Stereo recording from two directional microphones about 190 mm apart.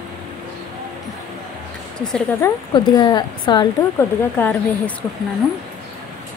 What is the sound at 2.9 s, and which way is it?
Speech, 20° left (ahead or behind).